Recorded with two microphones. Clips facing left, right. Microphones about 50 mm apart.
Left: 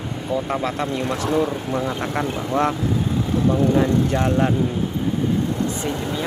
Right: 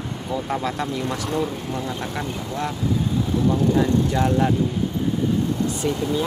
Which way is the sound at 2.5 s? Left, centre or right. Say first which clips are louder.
Left 9 dB; left.